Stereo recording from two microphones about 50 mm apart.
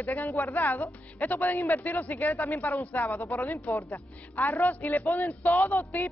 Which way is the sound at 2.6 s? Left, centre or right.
Left.